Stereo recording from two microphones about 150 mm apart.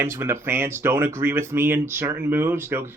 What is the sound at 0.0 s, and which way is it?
Speech, 15° right (ahead or behind).